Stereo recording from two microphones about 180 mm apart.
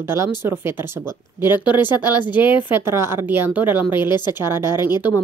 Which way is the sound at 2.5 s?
10° right (ahead or behind).